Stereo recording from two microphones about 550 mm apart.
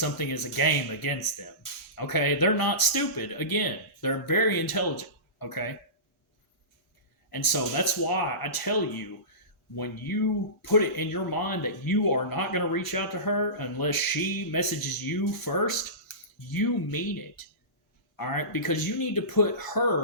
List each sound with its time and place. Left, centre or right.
0.0 s speech: left
7.3 s speech: left